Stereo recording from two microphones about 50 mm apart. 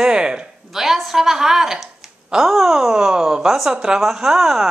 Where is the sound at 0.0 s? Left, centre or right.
Centre.